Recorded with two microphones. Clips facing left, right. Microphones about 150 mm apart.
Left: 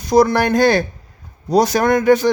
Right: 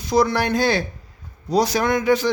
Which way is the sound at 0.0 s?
45° left (ahead or behind).